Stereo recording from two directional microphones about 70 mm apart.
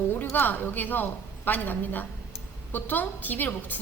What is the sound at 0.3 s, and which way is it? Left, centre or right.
A woman's voice, left.